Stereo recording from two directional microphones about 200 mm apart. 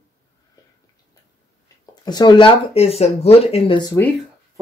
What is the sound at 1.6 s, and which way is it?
Speech, 20° left (ahead or behind).